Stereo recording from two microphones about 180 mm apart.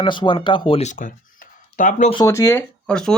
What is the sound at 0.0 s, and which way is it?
Speech, 25° left (ahead or behind).